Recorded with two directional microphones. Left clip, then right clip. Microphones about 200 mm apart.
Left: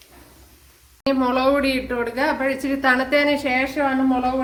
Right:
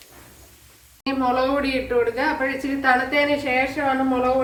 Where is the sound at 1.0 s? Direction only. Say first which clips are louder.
Left 2 dB; 55° left (ahead or behind).